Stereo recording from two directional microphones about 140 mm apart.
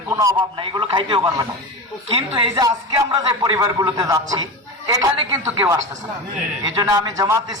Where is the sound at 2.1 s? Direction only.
45° right (ahead or behind).